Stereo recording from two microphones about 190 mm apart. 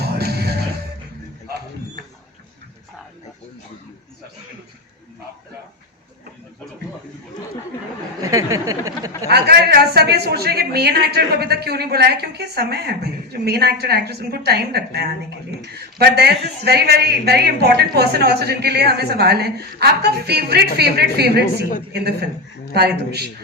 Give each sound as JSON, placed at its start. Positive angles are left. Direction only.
{"t": 0.0, "sound": "music", "side_deg": -55}
{"t": 8.2, "sound": "a sound", "side_deg": -15}
{"t": 9.3, "sound": "speech", "side_deg": -55}